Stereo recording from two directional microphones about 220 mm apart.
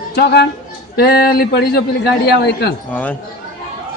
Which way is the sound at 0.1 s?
50° left (ahead or behind).